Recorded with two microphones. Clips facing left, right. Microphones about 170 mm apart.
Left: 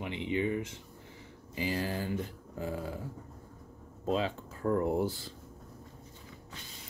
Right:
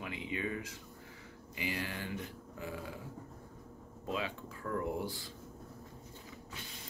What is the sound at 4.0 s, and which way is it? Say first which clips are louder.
Speech: left 7 dB; 35° left (ahead or behind).